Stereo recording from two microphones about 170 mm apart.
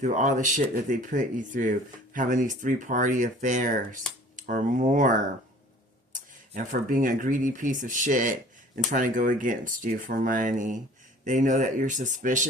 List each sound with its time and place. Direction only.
0.0 s speech: 45° right (ahead or behind)
6.1 s speech: 50° right (ahead or behind)